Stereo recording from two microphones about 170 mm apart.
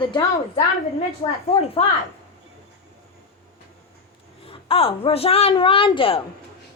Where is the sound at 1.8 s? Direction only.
35° left (ahead or behind).